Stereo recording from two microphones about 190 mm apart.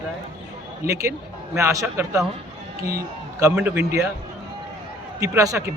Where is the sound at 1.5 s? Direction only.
15° right (ahead or behind).